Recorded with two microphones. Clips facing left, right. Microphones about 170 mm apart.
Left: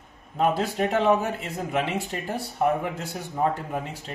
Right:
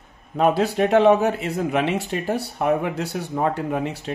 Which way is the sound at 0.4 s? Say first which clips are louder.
Right 5 dB; 75° right (ahead or behind).